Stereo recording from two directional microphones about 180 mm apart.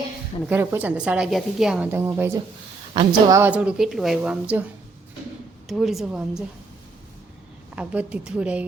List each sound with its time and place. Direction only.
0.4 s a woman's voice: 10° right (ahead or behind)
2.9 s a woman's voice: 25° right (ahead or behind)
3.3 s a woman's voice: 10° right (ahead or behind)
5.6 s a woman's voice: centre (ahead or behind)
7.8 s a woman's voice: 5° right (ahead or behind)